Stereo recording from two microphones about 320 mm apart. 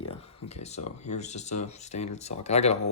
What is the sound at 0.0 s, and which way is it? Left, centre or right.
Speech, centre.